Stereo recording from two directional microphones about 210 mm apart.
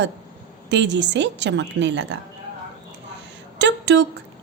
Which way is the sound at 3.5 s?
55° right (ahead or behind).